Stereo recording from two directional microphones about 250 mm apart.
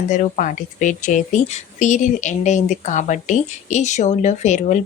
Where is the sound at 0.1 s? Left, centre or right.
Left.